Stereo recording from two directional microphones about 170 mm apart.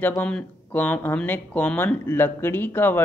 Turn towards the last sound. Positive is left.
turn(degrees=10)  # may be behind; listen again after turning